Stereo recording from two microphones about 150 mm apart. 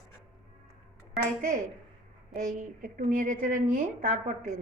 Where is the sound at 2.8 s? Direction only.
65° right (ahead or behind).